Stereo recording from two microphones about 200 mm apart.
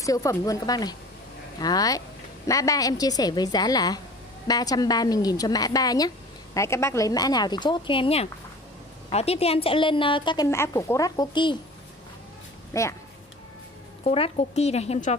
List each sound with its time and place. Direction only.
0.0 s a woman's voice: 15° left (ahead or behind)
12.7 s speech: 15° left (ahead or behind)
14.0 s speech: 30° left (ahead or behind)